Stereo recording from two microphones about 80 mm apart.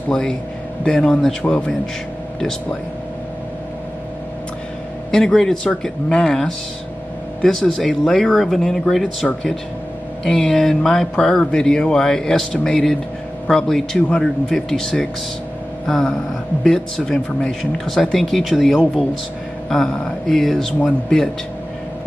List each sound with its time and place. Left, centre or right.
0.1 s speech: centre
5.1 s speech: centre